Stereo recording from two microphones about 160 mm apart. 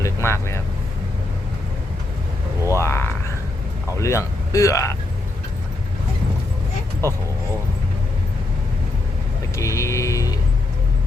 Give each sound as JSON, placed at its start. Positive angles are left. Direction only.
{"t": 0.0, "sound": "vehicle", "side_deg": 15}
{"t": 2.7, "sound": "a sound", "side_deg": 15}
{"t": 3.9, "sound": "speech", "side_deg": 20}
{"t": 9.6, "sound": "vehicle", "side_deg": 20}